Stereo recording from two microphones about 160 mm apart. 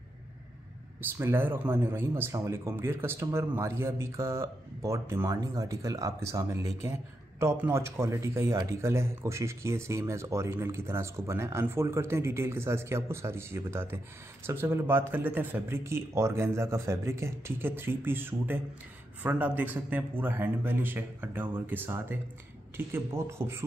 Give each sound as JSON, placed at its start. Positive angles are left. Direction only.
{"t": 1.1, "sound": "speech", "side_deg": -15}